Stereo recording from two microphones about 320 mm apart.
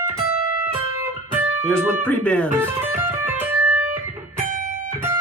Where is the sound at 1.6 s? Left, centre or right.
Centre.